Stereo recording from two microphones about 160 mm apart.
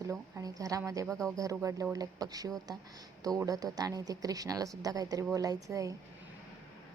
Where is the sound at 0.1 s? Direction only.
20° right (ahead or behind).